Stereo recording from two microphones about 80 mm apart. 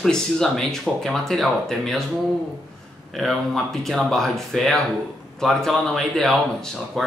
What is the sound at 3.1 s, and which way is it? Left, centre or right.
Speech, centre.